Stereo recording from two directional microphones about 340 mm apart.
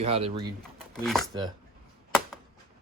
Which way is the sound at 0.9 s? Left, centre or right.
Centre.